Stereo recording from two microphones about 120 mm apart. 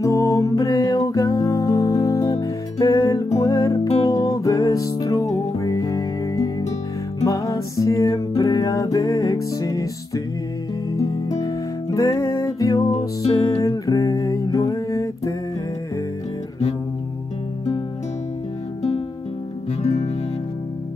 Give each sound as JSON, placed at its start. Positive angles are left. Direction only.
{"t": 0.0, "sound": "music", "side_deg": 30}
{"t": 19.8, "sound": "music", "side_deg": 60}